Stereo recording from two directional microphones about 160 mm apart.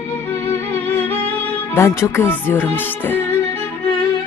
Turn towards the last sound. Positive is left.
turn(degrees=10)  # may be behind; listen again after turning